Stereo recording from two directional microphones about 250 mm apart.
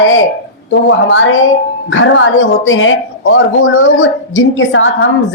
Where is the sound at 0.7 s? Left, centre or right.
Left.